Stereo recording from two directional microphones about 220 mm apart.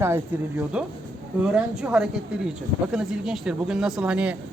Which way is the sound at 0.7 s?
5° right (ahead or behind).